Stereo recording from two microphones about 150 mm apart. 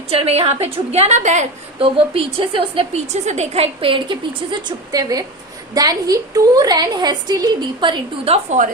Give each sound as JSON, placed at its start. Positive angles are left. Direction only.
{"t": 0.1, "sound": "a woman's voice", "side_deg": -40}